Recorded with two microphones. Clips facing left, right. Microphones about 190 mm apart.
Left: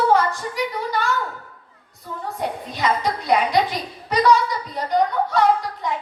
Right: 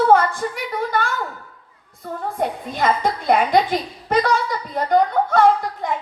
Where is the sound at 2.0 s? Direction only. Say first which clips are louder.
Right 4 dB; 55° right (ahead or behind).